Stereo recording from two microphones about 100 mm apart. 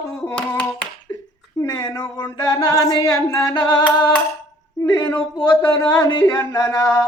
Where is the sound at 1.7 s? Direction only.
45° left (ahead or behind).